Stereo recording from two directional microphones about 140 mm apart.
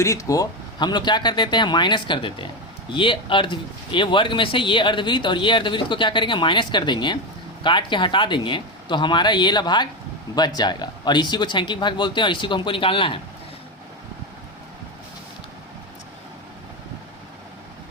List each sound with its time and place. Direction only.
0.0 s speech: 25° left (ahead or behind); by 13.1 s 40° left (ahead or behind)